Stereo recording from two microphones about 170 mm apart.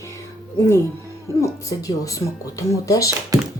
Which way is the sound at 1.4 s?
20° left (ahead or behind).